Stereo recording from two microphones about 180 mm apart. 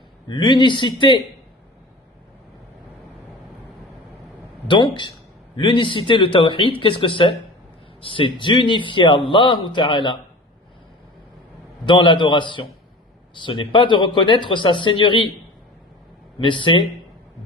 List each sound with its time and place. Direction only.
0.3 s a man's voice: 25° left (ahead or behind)
4.7 s a man's voice: 25° left (ahead or behind)
11.9 s a man's voice: 25° left (ahead or behind)
16.4 s a man's voice: 25° left (ahead or behind)